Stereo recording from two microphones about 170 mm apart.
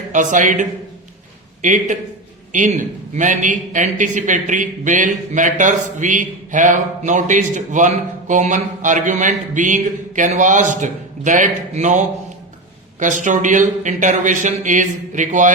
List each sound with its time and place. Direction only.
0.1 s a man's voice: 45° right (ahead or behind)